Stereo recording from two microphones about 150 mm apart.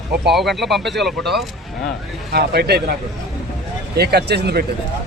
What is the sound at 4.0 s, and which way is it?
Speech, 90° right.